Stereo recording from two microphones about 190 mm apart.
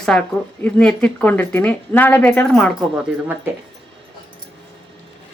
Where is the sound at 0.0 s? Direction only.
5° left (ahead or behind).